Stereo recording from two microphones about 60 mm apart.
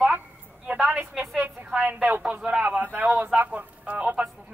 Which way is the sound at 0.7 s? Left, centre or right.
Right.